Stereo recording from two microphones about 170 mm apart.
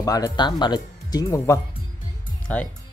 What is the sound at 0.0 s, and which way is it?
Speech, 20° left (ahead or behind).